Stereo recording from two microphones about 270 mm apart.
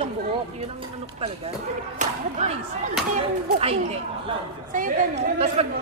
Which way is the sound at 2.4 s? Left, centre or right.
Right.